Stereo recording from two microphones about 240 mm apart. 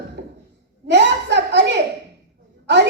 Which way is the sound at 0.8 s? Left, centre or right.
Right.